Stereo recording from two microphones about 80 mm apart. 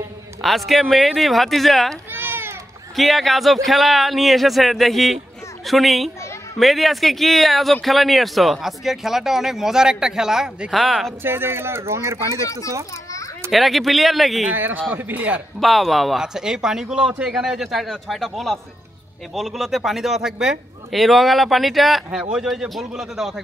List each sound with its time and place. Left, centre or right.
0.4 s speech: centre
2.1 s cat: right
3.0 s speech: centre
11.2 s speech: right
12.4 s a child's voice: left
13.5 s speech: centre
14.5 s a man's voice: right
15.6 s speech: centre